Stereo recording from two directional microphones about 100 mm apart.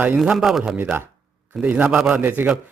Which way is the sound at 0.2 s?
Centre (ahead or behind).